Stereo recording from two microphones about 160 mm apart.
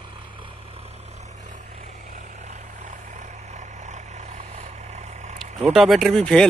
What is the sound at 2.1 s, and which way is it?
Vehicle, 50° right (ahead or behind).